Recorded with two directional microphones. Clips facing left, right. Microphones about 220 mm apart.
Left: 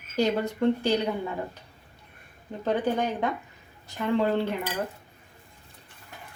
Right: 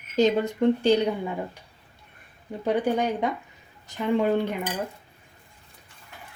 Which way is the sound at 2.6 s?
10° right (ahead or behind).